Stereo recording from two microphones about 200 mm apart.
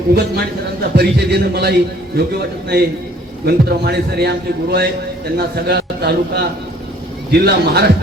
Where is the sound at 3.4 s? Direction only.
55° right (ahead or behind).